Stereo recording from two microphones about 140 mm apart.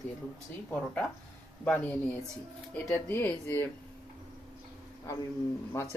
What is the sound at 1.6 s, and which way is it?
Speech, 10° left (ahead or behind).